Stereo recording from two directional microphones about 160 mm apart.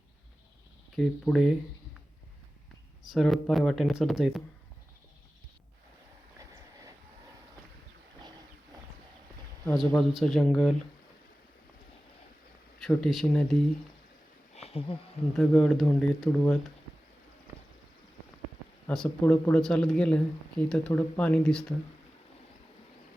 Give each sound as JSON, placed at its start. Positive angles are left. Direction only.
{"t": 0.9, "sound": "speech", "side_deg": 0}
{"t": 3.1, "sound": "speech", "side_deg": 0}
{"t": 9.6, "sound": "speech", "side_deg": 5}
{"t": 12.8, "sound": "speech", "side_deg": 5}
{"t": 14.5, "sound": "a sound", "side_deg": 40}
{"t": 15.4, "sound": "speech", "side_deg": 5}
{"t": 18.9, "sound": "speech", "side_deg": 10}